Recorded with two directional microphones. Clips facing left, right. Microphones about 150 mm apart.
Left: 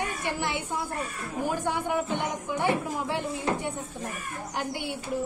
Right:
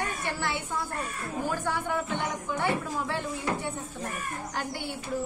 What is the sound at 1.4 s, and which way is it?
A woman's voice, 15° left (ahead or behind).